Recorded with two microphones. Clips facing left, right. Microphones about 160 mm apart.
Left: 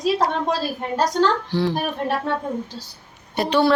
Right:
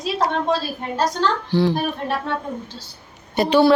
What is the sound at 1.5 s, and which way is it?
Speech, centre (ahead or behind).